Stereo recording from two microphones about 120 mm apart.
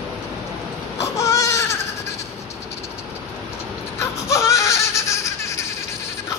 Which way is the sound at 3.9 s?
25° left (ahead or behind).